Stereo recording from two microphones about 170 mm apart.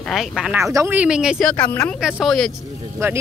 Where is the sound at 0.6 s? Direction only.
15° right (ahead or behind).